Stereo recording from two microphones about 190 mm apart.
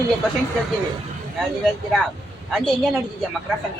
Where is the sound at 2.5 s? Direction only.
Centre (ahead or behind).